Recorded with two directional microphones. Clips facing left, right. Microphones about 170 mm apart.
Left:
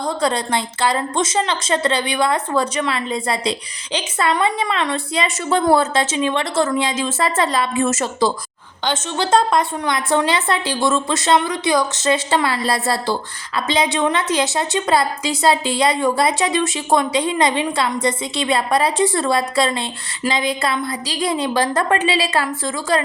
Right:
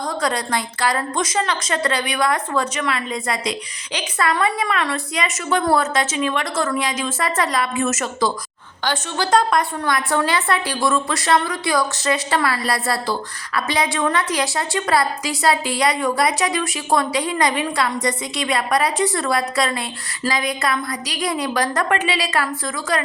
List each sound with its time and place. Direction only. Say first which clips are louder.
0.0 s a woman's voice: left 3 dB; 25° left (ahead or behind)